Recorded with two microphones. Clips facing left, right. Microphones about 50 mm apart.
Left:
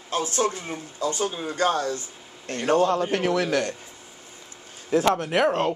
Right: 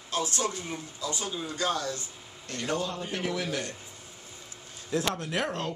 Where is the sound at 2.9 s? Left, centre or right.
Left.